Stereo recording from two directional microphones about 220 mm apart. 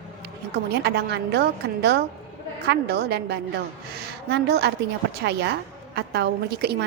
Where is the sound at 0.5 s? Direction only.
50° right (ahead or behind).